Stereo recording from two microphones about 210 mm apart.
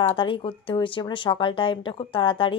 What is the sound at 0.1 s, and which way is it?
Speech, 25° left (ahead or behind).